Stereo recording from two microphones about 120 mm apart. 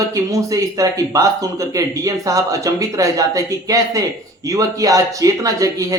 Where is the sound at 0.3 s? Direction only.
30° right (ahead or behind).